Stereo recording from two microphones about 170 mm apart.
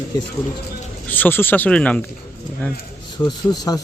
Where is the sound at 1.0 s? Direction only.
10° left (ahead or behind).